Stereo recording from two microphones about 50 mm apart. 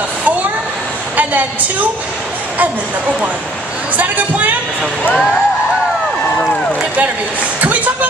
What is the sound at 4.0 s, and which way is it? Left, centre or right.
Speech, right.